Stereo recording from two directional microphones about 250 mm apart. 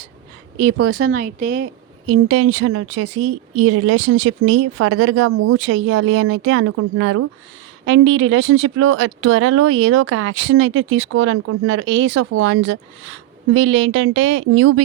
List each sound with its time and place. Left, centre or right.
0.5 s speech: right
1.0 s speech: right
1.5 s speech: right